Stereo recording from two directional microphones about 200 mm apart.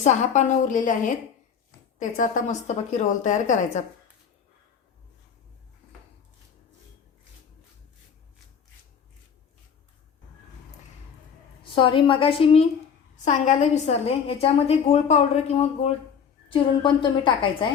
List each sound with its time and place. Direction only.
0.0 s a woman's voice: 35° left (ahead or behind)
11.7 s a woman's voice: 25° left (ahead or behind)
13.2 s a woman's voice: 40° left (ahead or behind)
16.5 s a woman's voice: 25° left (ahead or behind)